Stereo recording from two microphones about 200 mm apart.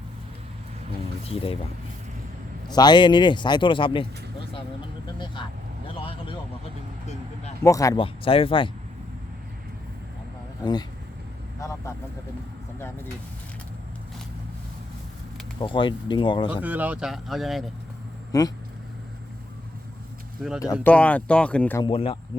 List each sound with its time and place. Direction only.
2.6 s speech: 20° left (ahead or behind)
5.2 s speech: 25° left (ahead or behind)
5.9 s vehicle: 25° left (ahead or behind)
7.6 s speech: 15° left (ahead or behind)
8.0 s speech: 25° left (ahead or behind)
10.6 s speech: 20° left (ahead or behind)
15.5 s speech: 25° left (ahead or behind)
16.6 s speech: 10° right (ahead or behind)
18.3 s speech: 20° left (ahead or behind)
20.4 s speech: 5° right (ahead or behind)
21.8 s speech: 25° left (ahead or behind)